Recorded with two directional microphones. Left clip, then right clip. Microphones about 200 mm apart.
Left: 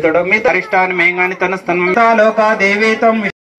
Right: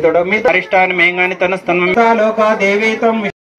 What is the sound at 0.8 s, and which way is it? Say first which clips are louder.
Speech: right 1 dB; 85° right.